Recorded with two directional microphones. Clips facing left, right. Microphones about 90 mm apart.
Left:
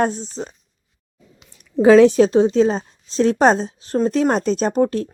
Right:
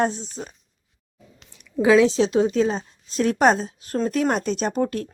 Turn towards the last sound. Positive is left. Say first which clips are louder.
# left 5 dB
turn(degrees=35)  # may be behind; listen again after turning